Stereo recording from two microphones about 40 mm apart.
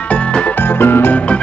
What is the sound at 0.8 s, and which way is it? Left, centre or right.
Music, left.